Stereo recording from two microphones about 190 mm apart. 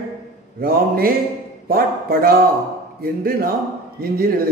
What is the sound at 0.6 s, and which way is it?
A man's voice, 50° right (ahead or behind).